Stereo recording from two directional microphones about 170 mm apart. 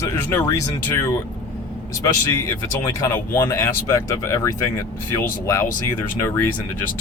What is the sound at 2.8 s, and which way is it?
Speech, 20° left (ahead or behind).